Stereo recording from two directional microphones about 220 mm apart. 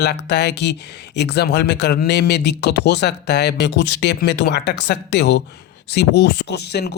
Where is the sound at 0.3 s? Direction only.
50° left (ahead or behind).